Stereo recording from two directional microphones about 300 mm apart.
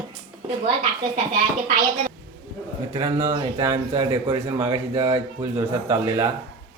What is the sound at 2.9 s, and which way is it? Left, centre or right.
Speech, centre.